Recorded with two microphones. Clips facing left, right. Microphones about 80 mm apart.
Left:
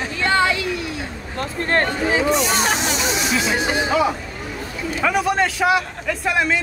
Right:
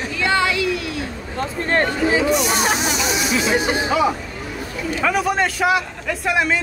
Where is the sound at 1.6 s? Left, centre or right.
Centre.